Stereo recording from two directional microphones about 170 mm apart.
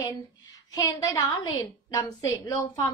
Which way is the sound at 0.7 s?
20° left (ahead or behind).